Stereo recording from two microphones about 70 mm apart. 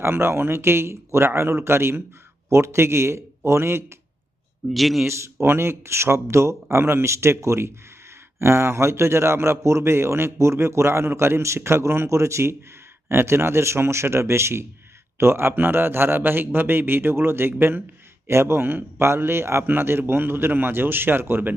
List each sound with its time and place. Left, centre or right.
0.0 s a man's voice: right
4.7 s a man's voice: centre
5.0 s a man's voice: right